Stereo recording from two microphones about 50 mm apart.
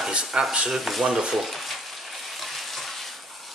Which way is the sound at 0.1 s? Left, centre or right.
Centre.